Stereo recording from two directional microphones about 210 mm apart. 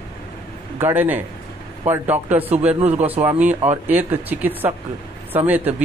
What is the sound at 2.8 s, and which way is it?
Speech, 30° right (ahead or behind).